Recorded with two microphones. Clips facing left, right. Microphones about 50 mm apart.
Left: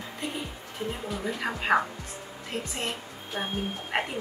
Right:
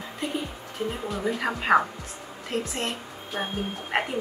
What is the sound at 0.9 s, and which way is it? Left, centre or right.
A woman's voice, centre.